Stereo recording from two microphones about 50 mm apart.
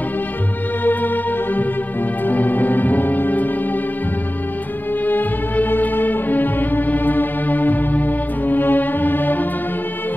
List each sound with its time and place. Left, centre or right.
0.8 s music: left
5.0 s music: left